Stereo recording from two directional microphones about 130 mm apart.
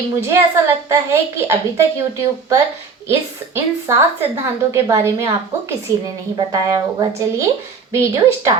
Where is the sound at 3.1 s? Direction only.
20° right (ahead or behind).